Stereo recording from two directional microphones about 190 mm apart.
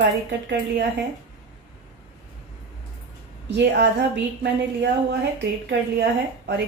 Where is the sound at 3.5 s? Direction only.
65° right (ahead or behind).